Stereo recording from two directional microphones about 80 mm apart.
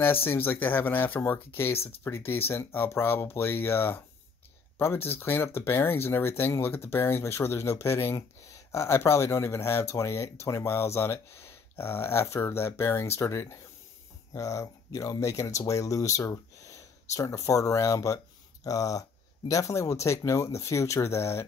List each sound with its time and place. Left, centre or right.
0.0 s speech: left